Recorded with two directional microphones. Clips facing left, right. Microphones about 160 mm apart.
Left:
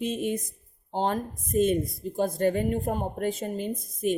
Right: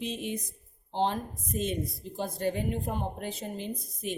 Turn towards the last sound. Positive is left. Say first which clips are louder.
# left 8 dB
turn(degrees=50)  # may be behind; listen again after turning